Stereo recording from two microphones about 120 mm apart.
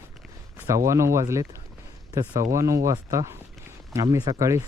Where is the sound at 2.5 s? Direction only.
25° right (ahead or behind).